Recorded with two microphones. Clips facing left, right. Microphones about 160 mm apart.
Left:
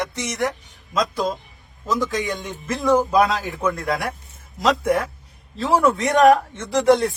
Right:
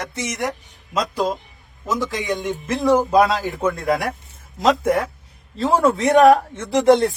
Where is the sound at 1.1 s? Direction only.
40° right (ahead or behind).